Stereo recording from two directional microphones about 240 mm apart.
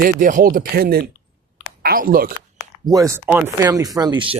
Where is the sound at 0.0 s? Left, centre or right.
Right.